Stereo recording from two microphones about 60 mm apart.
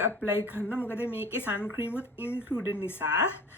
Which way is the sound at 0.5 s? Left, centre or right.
Left.